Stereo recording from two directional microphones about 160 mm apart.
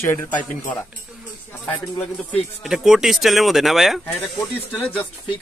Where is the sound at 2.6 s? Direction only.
5° right (ahead or behind).